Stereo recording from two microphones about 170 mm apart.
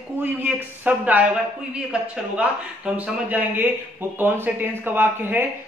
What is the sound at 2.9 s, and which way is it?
Speech, 10° right (ahead or behind).